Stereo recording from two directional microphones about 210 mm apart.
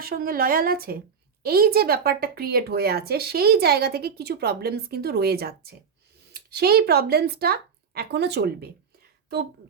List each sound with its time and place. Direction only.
0.0 s a woman's voice: 45° right (ahead or behind)